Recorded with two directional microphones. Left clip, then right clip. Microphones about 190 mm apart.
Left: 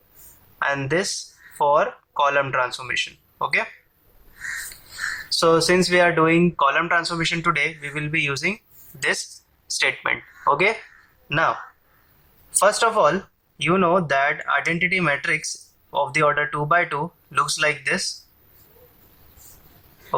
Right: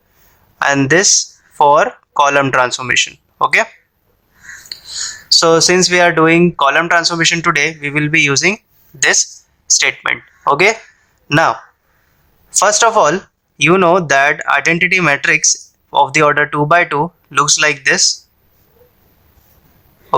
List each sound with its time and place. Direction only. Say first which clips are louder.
0.6 s speech: right 11 dB; 45° right (ahead or behind)
4.7 s whispering: right 16 dB; 50° right (ahead or behind)
5.3 s speech: right 8 dB; 40° right (ahead or behind)
9.7 s speech: right 8 dB; 30° right (ahead or behind)
10.5 s speech: right 8 dB; 40° right (ahead or behind)
12.5 s speech: right 8 dB; 45° right (ahead or behind)